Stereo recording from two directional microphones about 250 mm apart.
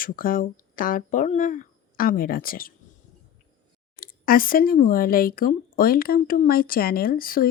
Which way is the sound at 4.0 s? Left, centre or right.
Left.